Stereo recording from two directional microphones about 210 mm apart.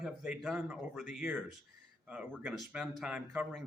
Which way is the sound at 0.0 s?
5° right (ahead or behind).